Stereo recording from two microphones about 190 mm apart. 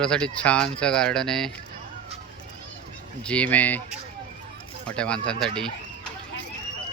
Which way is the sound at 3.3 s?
5° left (ahead or behind).